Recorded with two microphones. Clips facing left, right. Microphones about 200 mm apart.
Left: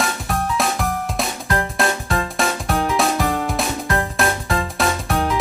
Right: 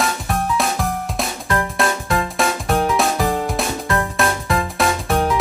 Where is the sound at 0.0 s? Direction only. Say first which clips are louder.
Right 1 dB; centre (ahead or behind).